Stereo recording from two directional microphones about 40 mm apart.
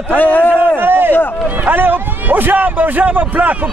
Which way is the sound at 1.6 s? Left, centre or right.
Right.